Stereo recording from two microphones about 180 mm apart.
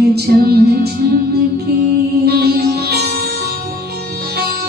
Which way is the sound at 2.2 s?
60° right (ahead or behind).